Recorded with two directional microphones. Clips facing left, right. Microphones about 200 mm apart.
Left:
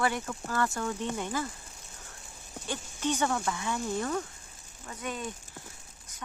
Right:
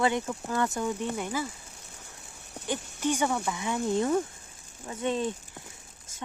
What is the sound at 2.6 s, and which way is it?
Speech, 15° right (ahead or behind).